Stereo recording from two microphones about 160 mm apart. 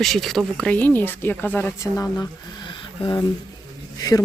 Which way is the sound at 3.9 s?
25° left (ahead or behind).